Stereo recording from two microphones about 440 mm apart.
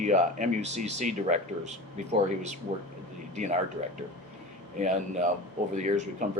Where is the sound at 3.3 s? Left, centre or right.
Centre.